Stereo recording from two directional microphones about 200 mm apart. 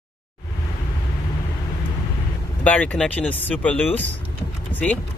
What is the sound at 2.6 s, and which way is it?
Speech, 5° left (ahead or behind).